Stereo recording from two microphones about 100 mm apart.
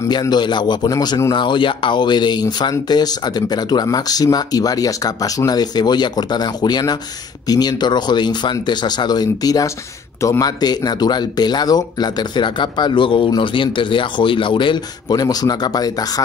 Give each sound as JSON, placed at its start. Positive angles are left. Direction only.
{"t": 0.2, "sound": "speech", "side_deg": 45}
{"t": 1.3, "sound": "speech", "side_deg": 50}